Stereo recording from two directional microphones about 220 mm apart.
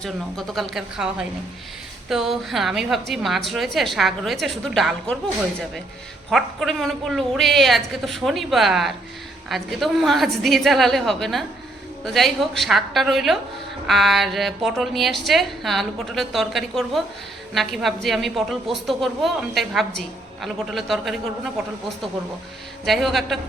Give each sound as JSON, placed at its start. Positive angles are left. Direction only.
{"t": 0.0, "sound": "a woman's voice", "side_deg": 0}
{"t": 6.3, "sound": "a woman's voice", "side_deg": 0}
{"t": 22.9, "sound": "a woman's voice", "side_deg": 0}